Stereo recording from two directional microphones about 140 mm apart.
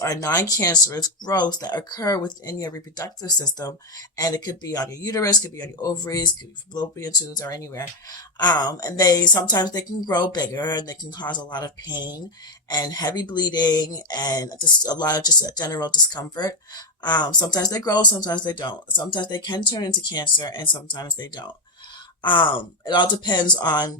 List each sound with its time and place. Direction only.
0.0 s speech: 25° left (ahead or behind)